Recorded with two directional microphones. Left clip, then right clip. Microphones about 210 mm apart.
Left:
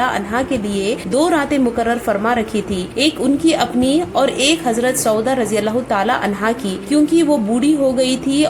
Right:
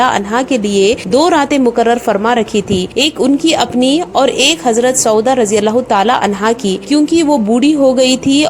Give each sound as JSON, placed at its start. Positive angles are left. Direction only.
{"t": 0.0, "sound": "a woman's voice", "side_deg": -35}